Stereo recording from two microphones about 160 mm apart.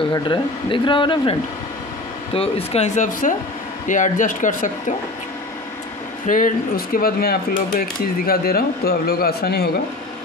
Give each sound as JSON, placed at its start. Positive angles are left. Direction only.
{"t": 0.1, "sound": "speech", "side_deg": 30}
{"t": 2.3, "sound": "speech", "side_deg": 40}
{"t": 6.2, "sound": "speech", "side_deg": 55}